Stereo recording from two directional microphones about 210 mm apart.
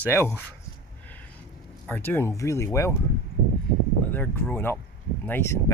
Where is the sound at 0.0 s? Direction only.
10° left (ahead or behind).